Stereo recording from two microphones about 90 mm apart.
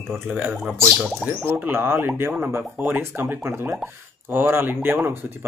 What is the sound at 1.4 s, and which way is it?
Speech, 25° right (ahead or behind).